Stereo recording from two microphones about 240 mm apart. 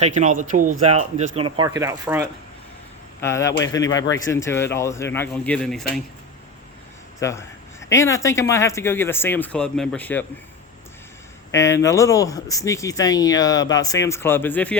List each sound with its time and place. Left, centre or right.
0.0 s speech: right; by 2.2 s centre
3.2 s speech: centre
7.2 s speech: centre
11.5 s speech: centre